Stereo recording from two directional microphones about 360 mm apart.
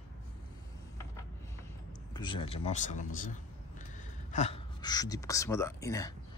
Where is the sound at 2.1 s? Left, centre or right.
Centre.